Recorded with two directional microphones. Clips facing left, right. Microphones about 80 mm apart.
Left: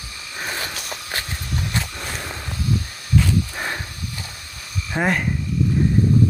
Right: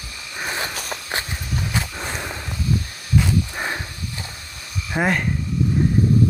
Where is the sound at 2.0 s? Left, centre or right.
Centre.